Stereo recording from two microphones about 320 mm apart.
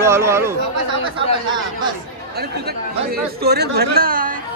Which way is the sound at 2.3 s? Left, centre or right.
Right.